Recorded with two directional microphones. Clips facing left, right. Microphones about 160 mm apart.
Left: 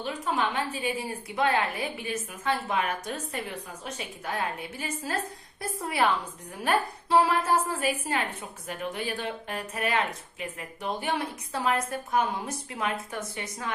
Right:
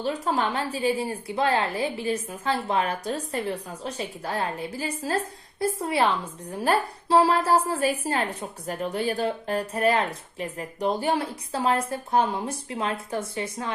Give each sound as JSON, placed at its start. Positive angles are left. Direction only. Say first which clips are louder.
{"t": 0.0, "sound": "a woman's voice", "louder": "right 3 dB", "side_deg": -35}